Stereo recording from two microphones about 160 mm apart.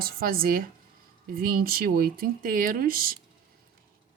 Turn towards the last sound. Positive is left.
turn(degrees=-65)  # may be behind; listen again after turning